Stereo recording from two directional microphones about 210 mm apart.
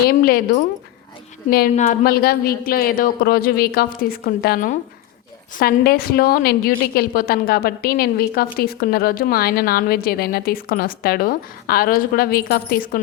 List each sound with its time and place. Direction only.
0.1 s a woman's voice: 45° left (ahead or behind)
1.7 s a woman's voice: 35° left (ahead or behind)